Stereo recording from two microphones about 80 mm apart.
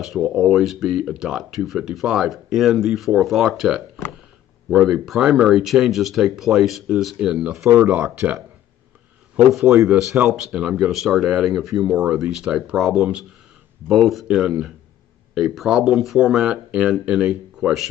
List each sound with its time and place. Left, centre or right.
0.0 s speech: centre
7.7 s speech: centre
9.5 s speech: centre